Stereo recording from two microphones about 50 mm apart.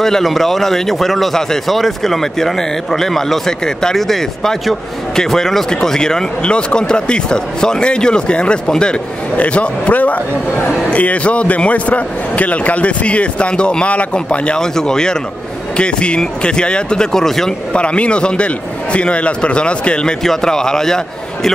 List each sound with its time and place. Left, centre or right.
0.0 s a man's voice: centre
17.7 s a man's voice: left